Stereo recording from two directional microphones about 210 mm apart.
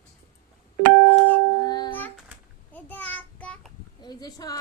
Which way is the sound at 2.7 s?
10° left (ahead or behind).